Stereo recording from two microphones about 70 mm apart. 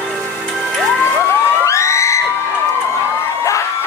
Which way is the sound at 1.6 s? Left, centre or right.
Left.